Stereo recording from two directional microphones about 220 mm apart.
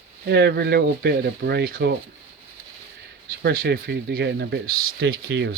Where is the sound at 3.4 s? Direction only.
45° right (ahead or behind).